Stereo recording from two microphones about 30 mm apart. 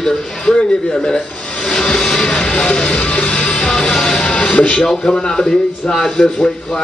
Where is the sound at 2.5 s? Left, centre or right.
Left.